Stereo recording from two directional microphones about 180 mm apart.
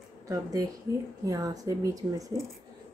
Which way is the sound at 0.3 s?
20° right (ahead or behind).